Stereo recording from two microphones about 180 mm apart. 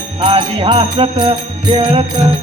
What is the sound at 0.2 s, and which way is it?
Music, 30° right (ahead or behind).